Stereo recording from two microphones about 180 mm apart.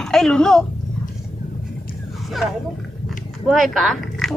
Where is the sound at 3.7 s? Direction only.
Centre (ahead or behind).